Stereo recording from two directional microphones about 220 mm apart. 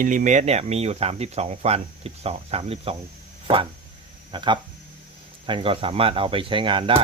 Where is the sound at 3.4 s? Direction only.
25° right (ahead or behind).